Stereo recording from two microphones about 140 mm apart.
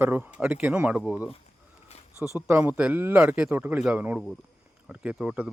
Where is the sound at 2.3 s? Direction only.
15° right (ahead or behind).